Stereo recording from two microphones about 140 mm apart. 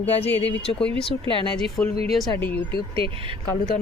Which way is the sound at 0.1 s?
45° left (ahead or behind).